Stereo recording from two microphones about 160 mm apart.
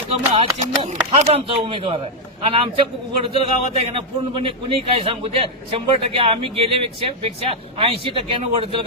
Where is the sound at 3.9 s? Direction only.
35° right (ahead or behind).